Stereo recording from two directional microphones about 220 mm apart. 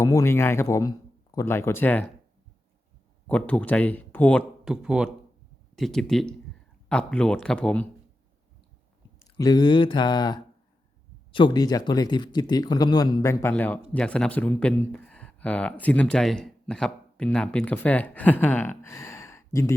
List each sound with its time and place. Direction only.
0.0 s speech: 15° left (ahead or behind)
3.2 s speech: 5° left (ahead or behind)
9.1 s speech: 15° left (ahead or behind)